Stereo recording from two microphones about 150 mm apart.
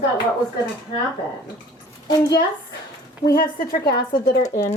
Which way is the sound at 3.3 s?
90° left.